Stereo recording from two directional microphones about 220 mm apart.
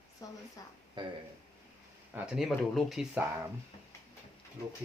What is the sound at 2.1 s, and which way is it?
Speech, 5° right (ahead or behind).